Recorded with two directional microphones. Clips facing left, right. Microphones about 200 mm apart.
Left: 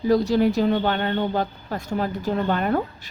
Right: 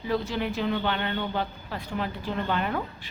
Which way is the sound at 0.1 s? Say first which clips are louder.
Left 9 dB; 40° left (ahead or behind).